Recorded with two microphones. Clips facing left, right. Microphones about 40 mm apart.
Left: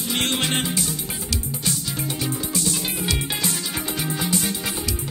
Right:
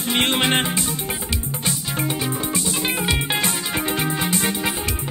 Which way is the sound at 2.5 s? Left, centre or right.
Right.